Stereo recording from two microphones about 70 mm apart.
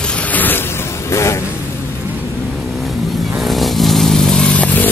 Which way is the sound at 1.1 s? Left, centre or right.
Left.